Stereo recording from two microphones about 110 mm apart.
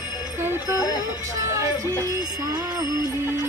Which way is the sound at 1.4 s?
30° right (ahead or behind).